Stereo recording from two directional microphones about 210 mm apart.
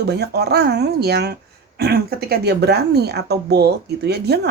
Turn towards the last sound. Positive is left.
turn(degrees=-50)  # may be behind; listen again after turning